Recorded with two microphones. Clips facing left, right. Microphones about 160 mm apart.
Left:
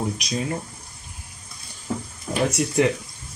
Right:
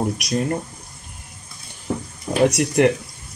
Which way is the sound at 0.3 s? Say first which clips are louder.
Right 6 dB; 60° right (ahead or behind).